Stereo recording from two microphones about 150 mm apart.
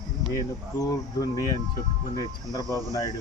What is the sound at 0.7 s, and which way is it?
Speech, 25° left (ahead or behind).